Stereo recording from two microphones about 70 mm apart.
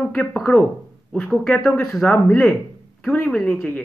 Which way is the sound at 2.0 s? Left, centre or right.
Left.